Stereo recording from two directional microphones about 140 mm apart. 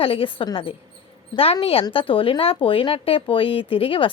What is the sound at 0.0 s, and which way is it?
A woman's voice, 40° left (ahead or behind).